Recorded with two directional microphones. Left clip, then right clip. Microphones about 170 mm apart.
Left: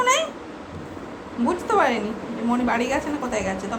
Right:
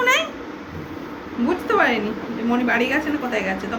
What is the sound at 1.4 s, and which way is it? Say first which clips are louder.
A woman's voice: right 1 dB; 15° left (ahead or behind).